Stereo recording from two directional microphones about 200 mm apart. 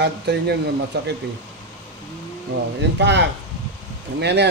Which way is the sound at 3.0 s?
60° right (ahead or behind).